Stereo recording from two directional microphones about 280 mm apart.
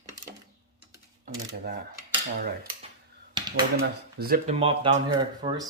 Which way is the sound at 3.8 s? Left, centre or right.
Right.